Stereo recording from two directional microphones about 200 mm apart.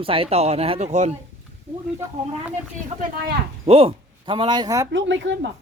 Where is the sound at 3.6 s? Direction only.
30° right (ahead or behind).